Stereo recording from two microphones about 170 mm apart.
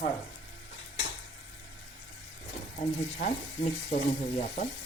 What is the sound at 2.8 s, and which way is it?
Speech, 45° left (ahead or behind).